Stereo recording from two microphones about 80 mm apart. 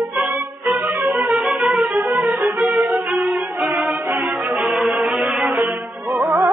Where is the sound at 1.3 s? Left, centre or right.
Centre.